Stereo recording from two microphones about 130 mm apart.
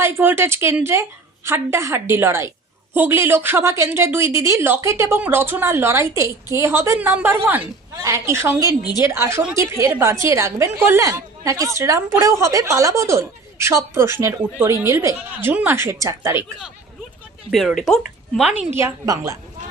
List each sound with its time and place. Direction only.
0.0 s a woman's voice: 20° right (ahead or behind)
17.7 s speech: centre (ahead or behind)
18.7 s a woman's voice: 20° right (ahead or behind)